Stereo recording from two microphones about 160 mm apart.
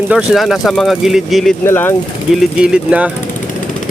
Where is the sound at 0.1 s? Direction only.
5° right (ahead or behind).